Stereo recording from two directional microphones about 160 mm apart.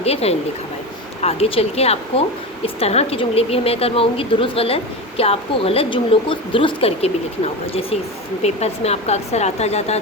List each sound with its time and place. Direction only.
0.0 s speech: 40° left (ahead or behind)